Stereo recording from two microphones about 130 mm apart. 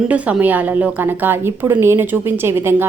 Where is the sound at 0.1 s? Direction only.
10° right (ahead or behind).